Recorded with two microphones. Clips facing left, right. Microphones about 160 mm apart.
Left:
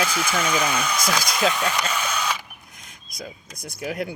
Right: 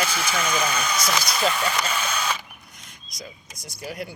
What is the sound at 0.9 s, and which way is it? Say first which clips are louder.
Speech: left 1 dB; 5° right (ahead or behind).